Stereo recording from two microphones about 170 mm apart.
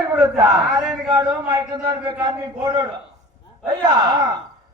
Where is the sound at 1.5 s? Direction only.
25° right (ahead or behind).